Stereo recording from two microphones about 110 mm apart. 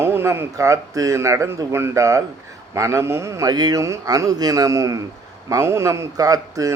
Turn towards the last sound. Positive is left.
turn(degrees=-30)  # may be behind; listen again after turning